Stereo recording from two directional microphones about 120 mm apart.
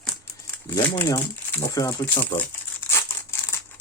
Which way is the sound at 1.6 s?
25° left (ahead or behind).